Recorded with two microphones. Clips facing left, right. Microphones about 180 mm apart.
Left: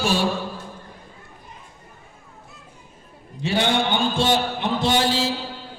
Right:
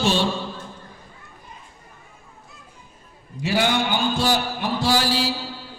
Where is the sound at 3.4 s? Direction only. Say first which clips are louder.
Even; 25° left (ahead or behind).